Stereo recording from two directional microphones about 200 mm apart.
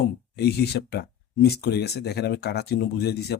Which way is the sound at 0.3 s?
55° left (ahead or behind).